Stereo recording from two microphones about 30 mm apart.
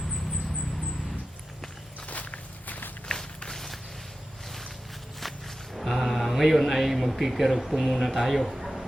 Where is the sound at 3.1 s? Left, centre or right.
Left.